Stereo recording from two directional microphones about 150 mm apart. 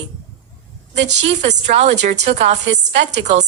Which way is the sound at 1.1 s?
45° right (ahead or behind).